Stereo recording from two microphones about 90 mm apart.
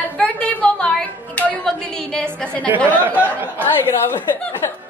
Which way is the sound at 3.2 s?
20° right (ahead or behind).